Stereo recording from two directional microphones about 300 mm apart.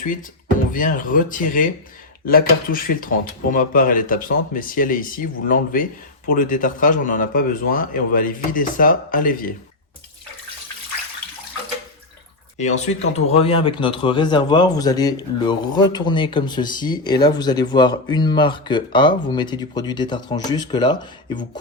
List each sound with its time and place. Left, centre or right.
0.7 s speech: left
12.5 s speech: left